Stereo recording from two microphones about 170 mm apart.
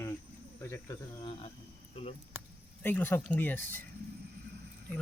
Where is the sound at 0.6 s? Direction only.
15° left (ahead or behind).